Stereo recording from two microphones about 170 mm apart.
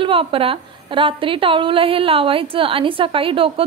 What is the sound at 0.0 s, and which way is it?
A woman's voice, 30° right (ahead or behind).